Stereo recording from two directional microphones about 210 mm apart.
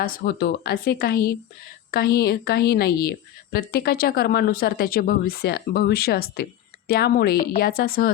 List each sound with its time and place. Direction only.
0.0 s a woman's voice: 45° left (ahead or behind)